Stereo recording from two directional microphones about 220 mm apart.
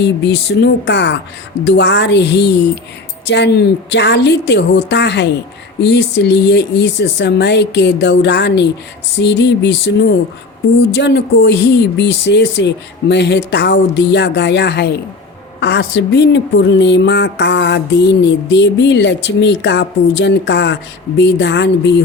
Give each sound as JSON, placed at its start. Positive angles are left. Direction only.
{"t": 0.0, "sound": "a woman's voice", "side_deg": 50}
{"t": 10.9, "sound": "a woman's voice", "side_deg": 50}